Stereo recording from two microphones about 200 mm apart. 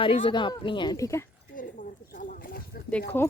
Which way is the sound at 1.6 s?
40° left (ahead or behind).